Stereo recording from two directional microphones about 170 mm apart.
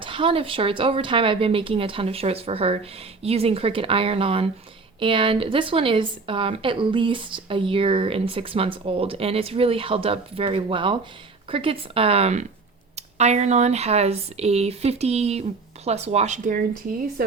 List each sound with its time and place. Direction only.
0.0 s a woman's voice: 30° right (ahead or behind)